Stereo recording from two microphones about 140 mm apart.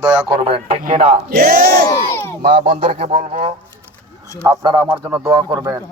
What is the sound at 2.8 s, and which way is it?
Speech, 45° right (ahead or behind).